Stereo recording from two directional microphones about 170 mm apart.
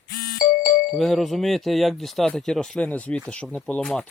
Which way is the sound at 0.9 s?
Centre (ahead or behind).